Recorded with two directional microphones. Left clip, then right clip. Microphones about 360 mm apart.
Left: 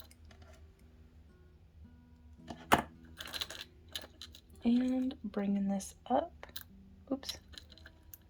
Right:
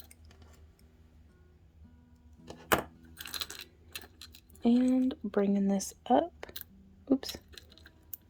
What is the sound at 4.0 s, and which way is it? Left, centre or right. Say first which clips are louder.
Speech: left 1 dB; centre.